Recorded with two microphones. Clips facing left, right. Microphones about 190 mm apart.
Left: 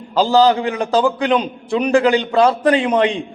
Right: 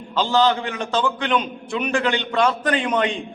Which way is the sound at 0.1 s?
35° left (ahead or behind).